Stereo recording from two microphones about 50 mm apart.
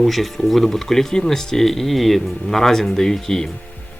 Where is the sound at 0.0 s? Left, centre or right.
Centre.